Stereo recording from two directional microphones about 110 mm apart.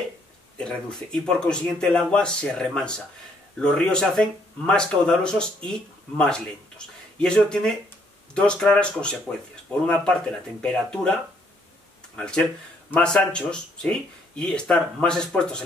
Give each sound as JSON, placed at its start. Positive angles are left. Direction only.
{"t": 0.6, "sound": "speech", "side_deg": 5}
{"t": 12.2, "sound": "speech", "side_deg": 5}